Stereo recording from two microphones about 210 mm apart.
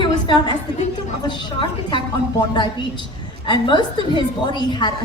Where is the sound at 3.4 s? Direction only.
20° left (ahead or behind).